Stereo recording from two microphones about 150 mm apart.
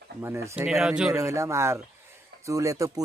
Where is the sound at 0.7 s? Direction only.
5° right (ahead or behind).